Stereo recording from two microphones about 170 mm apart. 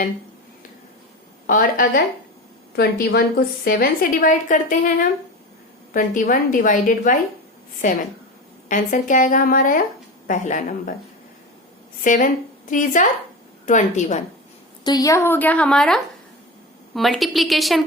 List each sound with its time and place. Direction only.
1.5 s a woman's voice: 55° left (ahead or behind)
2.7 s a woman's voice: 70° left (ahead or behind); by 4.9 s 50° left (ahead or behind)
5.9 s a woman's voice: 50° left (ahead or behind)
12.0 s a woman's voice: 50° left (ahead or behind)
14.8 s a woman's voice: 20° left (ahead or behind); by 17.8 s centre (ahead or behind)